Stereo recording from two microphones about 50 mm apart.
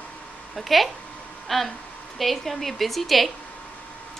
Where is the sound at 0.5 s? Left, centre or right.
Centre.